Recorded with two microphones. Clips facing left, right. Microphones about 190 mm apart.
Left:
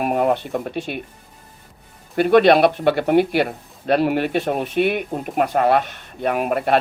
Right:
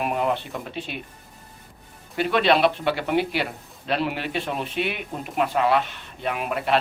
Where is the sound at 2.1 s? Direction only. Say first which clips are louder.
Left 7 dB; 50° left (ahead or behind).